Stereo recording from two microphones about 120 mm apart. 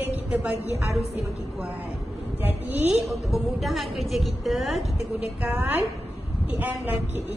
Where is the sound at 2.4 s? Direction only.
15° right (ahead or behind).